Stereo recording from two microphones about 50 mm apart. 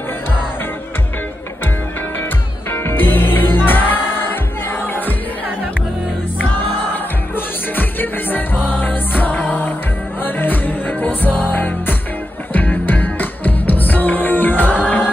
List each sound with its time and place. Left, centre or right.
2.7 s music: left
6.6 s music: left